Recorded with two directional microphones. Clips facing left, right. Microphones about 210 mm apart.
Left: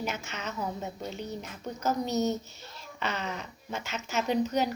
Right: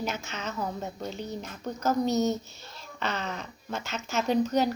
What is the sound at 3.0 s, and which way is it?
Speech, 10° left (ahead or behind).